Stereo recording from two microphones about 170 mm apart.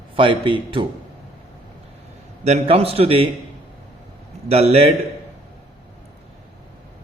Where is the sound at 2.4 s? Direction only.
35° right (ahead or behind).